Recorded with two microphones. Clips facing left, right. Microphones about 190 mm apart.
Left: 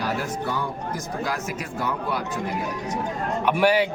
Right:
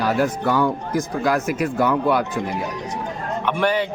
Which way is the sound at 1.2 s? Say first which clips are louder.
Right 10 dB; 60° right (ahead or behind).